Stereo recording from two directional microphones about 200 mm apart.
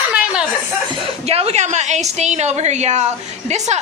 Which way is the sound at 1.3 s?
30° right (ahead or behind).